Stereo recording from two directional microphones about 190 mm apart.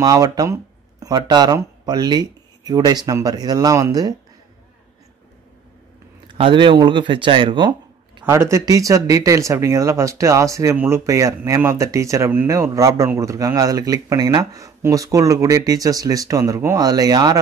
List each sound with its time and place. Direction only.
0.0 s speech: 20° right (ahead or behind)
6.2 s speech: 25° right (ahead or behind)
8.3 s speech: 15° right (ahead or behind)